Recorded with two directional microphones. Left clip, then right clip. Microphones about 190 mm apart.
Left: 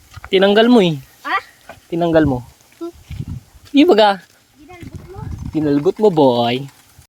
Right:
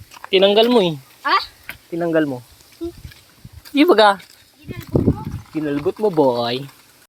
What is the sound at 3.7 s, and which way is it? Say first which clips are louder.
Speech: left 1 dB; 55° left (ahead or behind).